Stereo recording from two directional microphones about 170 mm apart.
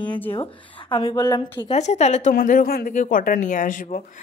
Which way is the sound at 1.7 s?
40° left (ahead or behind).